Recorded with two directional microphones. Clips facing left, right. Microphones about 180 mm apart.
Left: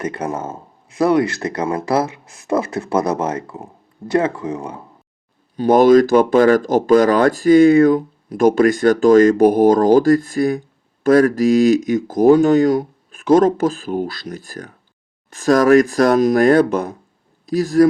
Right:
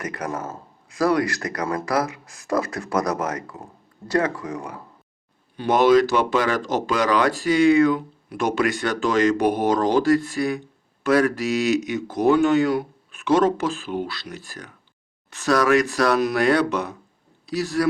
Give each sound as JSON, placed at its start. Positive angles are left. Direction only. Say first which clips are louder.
{"t": 0.0, "sound": "speech", "louder": "left 5 dB", "side_deg": 25}
{"t": 5.5, "sound": "speech", "louder": "left 6 dB", "side_deg": 45}